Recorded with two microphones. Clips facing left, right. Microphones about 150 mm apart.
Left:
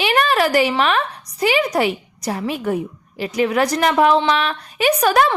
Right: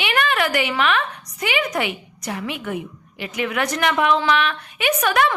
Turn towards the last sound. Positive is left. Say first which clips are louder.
# left 4 dB
turn(degrees=35)  # may be behind; listen again after turning